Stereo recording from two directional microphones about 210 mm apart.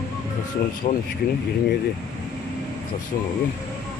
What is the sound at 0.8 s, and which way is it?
Speech, 35° left (ahead or behind).